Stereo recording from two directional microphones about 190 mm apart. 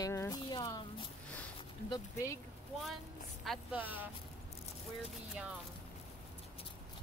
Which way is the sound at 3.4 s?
5° right (ahead or behind).